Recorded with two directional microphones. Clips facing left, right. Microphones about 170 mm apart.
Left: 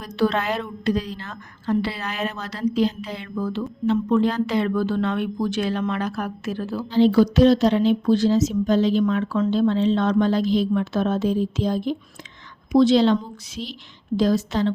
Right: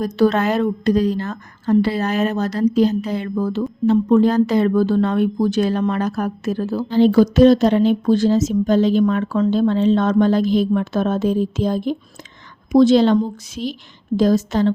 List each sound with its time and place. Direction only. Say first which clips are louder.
0.0 s a woman's voice: right 6 dB; 40° right (ahead or behind)